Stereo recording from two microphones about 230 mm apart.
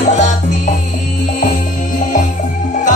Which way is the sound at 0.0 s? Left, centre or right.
Left.